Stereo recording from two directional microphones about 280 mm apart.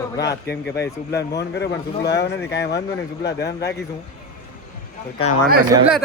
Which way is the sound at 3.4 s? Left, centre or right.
Centre.